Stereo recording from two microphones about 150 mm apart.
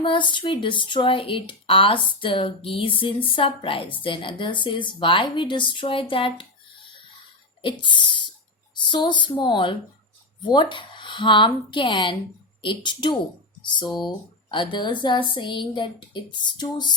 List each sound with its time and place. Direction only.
0.0 s speech: 35° left (ahead or behind)
7.6 s speech: 35° left (ahead or behind)